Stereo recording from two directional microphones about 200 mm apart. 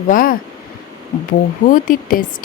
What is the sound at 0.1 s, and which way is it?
A woman's voice, 45° left (ahead or behind).